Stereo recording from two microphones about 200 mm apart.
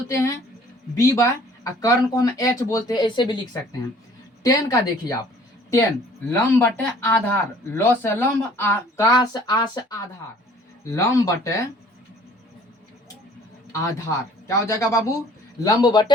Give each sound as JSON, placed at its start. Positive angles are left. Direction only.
{"t": 0.1, "sound": "speech", "side_deg": 15}
{"t": 6.3, "sound": "speech", "side_deg": 10}
{"t": 10.9, "sound": "speech", "side_deg": 15}
{"t": 13.7, "sound": "a man's voice", "side_deg": 15}